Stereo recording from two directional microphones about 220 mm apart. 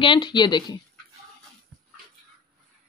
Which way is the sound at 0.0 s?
20° left (ahead or behind).